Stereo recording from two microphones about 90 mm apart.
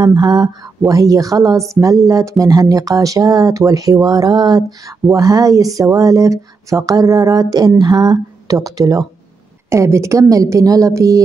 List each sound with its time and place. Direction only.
0.0 s speech: 50° right (ahead or behind)
0.9 s speech: 40° right (ahead or behind)
9.7 s speech: 30° right (ahead or behind)